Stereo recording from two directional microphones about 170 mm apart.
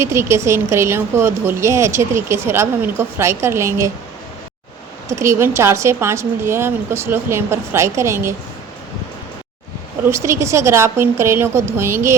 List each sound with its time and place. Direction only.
0.0 s a woman's voice: 15° right (ahead or behind)
5.0 s a woman's voice: 15° right (ahead or behind)
10.1 s a woman's voice: 15° right (ahead or behind)